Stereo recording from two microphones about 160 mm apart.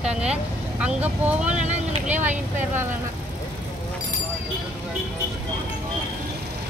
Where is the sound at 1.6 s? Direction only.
45° right (ahead or behind).